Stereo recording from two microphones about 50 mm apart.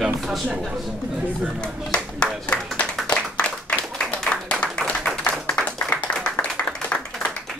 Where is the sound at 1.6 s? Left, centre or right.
Centre.